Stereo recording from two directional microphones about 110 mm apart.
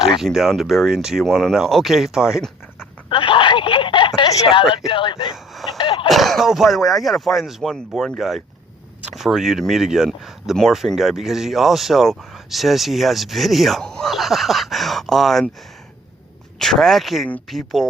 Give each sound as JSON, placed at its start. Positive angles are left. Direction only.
{"t": 0.2, "sound": "speech", "side_deg": 0}
{"t": 3.1, "sound": "a sound", "side_deg": 50}
{"t": 4.9, "sound": "speech", "side_deg": 50}
{"t": 5.7, "sound": "a sound", "side_deg": 50}
{"t": 6.1, "sound": "speech", "side_deg": 0}
{"t": 16.6, "sound": "speech", "side_deg": 5}